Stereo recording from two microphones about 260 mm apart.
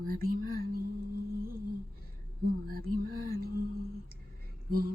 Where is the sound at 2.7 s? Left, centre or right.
Right.